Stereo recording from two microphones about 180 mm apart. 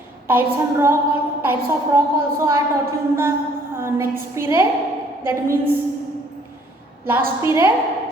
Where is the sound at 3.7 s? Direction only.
15° right (ahead or behind).